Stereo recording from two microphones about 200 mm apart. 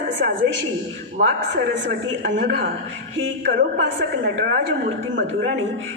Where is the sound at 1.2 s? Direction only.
45° right (ahead or behind).